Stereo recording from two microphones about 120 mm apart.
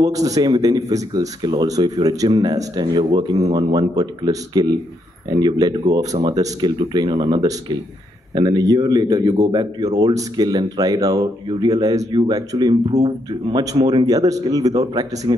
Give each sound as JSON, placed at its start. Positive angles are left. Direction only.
{"t": 0.0, "sound": "speech", "side_deg": -30}